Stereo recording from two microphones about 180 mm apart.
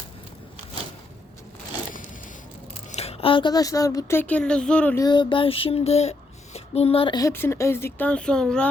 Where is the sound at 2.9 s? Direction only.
35° left (ahead or behind); by 5.0 s 5° left (ahead or behind).